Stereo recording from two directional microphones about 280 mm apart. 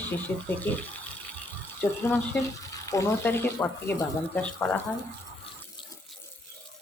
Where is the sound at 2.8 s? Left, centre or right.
Centre.